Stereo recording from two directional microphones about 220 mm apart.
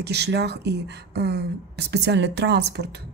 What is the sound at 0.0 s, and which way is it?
Speech, 50° right (ahead or behind).